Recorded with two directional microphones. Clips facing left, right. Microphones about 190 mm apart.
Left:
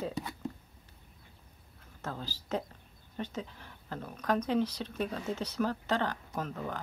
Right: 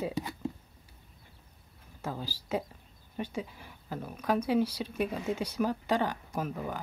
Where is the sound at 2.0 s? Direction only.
10° right (ahead or behind).